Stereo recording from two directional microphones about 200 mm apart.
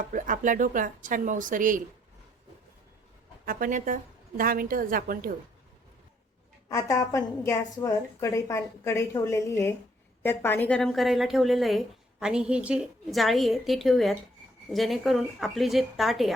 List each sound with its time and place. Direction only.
0.1 s speech: 40° right (ahead or behind)
3.4 s a woman's voice: 45° right (ahead or behind)
6.7 s a woman's voice: 15° left (ahead or behind); by 16.3 s centre (ahead or behind)